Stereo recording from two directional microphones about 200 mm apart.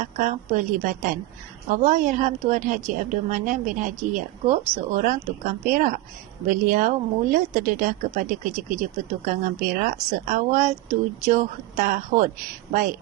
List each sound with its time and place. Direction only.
0.0 s a woman's voice: 40° right (ahead or behind)